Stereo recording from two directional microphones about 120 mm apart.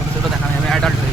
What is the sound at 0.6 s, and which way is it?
Speech, 5° left (ahead or behind).